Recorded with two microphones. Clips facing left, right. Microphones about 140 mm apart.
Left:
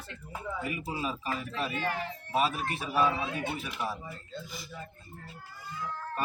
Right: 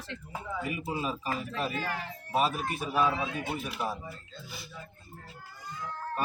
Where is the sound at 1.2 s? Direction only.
40° right (ahead or behind).